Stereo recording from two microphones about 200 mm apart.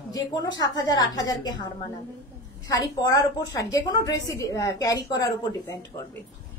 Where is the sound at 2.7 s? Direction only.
15° left (ahead or behind).